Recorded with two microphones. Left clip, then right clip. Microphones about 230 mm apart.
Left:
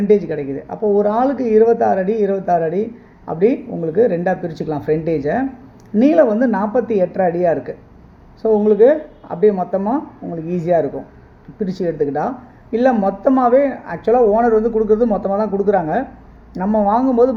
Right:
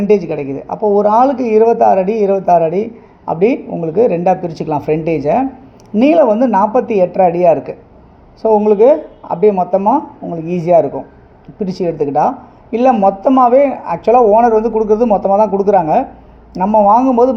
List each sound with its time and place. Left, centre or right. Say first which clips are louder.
0.1 s speech: right 2 dB; right